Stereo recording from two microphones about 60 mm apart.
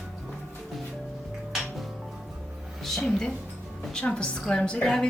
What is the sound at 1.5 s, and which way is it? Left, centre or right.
Music, centre.